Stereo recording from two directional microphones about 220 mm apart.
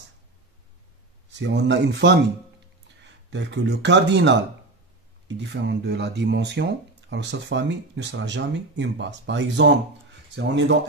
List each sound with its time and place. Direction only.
1.3 s speech: 50° right (ahead or behind)